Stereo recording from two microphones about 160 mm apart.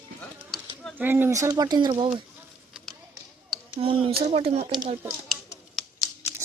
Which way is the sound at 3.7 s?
35° right (ahead or behind).